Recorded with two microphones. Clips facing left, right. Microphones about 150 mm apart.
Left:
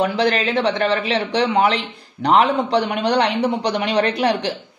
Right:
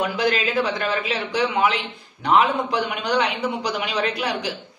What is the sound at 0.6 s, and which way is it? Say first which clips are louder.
A man's voice: left 4 dB; 35° left (ahead or behind).